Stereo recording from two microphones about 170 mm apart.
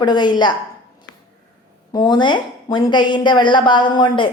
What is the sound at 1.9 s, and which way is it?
A woman's voice, 25° left (ahead or behind).